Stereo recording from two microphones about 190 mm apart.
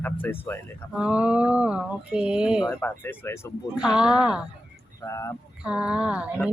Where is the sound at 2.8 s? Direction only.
15° left (ahead or behind).